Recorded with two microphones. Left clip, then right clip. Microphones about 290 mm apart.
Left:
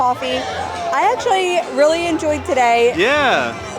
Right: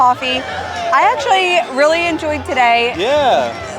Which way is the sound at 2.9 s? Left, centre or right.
Left.